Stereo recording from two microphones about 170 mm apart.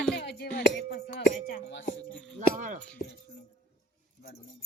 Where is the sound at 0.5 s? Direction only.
80° left.